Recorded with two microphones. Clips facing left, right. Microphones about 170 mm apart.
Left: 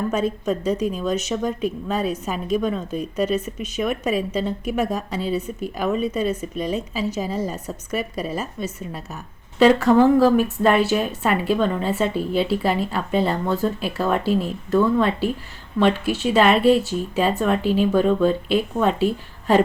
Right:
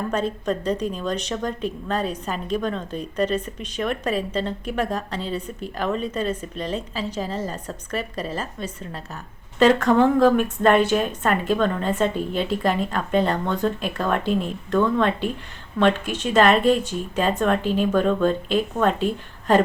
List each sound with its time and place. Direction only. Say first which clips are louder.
0.1 s a woman's voice: left 2 dB; 10° left (ahead or behind)